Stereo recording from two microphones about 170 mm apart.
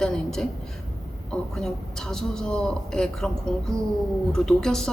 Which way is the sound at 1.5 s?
5° left (ahead or behind).